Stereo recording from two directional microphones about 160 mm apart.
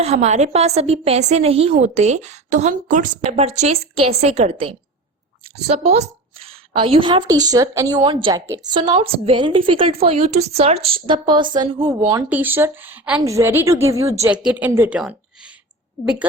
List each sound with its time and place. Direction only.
0.0 s a woman's voice: 45° right (ahead or behind); by 12.2 s 25° right (ahead or behind)
12.3 s a woman's voice: 10° right (ahead or behind)